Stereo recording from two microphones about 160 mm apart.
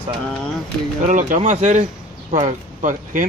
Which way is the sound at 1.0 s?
55° right (ahead or behind).